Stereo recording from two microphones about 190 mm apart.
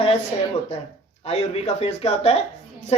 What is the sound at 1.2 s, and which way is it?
Speech, 35° left (ahead or behind).